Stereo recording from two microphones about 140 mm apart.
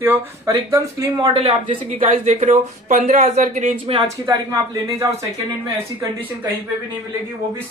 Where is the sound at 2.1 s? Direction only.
60° right (ahead or behind).